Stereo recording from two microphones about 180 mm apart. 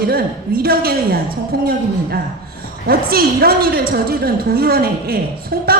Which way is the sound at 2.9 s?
55° right (ahead or behind).